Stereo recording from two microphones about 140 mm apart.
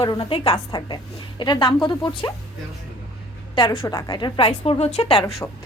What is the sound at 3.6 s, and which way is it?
A woman's voice, 35° left (ahead or behind).